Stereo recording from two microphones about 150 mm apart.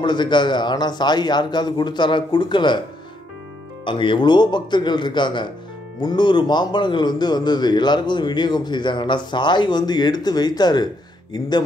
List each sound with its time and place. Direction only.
0.0 s speech: 30° left (ahead or behind)
3.8 s speech: 35° left (ahead or behind)